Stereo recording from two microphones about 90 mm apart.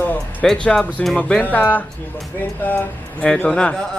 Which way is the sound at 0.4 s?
10° left (ahead or behind).